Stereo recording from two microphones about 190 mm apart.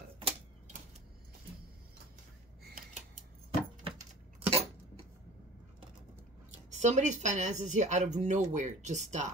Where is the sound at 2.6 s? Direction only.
50° right (ahead or behind).